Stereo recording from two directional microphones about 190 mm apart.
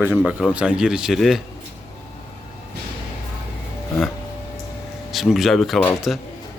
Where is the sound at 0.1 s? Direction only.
Centre (ahead or behind).